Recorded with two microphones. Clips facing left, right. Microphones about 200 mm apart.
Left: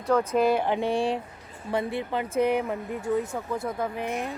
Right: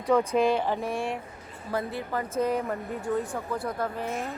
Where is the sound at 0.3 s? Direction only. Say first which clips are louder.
Left 1 dB; 5° left (ahead or behind).